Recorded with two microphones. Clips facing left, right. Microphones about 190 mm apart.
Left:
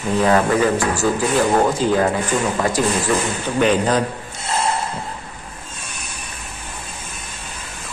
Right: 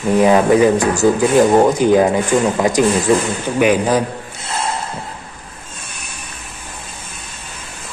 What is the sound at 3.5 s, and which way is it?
Speech, 10° right (ahead or behind).